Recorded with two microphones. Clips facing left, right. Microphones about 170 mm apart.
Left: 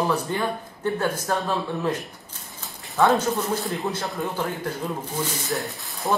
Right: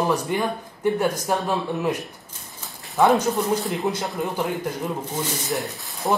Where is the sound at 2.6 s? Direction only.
Centre (ahead or behind).